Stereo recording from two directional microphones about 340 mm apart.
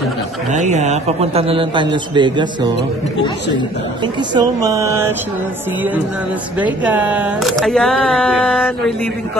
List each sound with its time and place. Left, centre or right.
0.7 s a man's voice: centre
4.0 s a man's voice: centre
6.6 s speech: centre